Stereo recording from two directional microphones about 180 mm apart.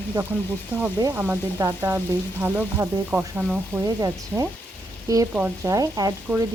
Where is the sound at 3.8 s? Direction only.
20° right (ahead or behind).